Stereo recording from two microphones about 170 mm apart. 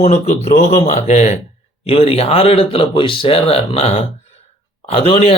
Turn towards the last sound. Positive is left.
turn(degrees=35)  # may be behind; listen again after turning